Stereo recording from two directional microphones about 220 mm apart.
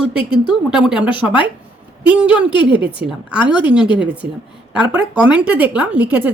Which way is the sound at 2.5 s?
20° left (ahead or behind).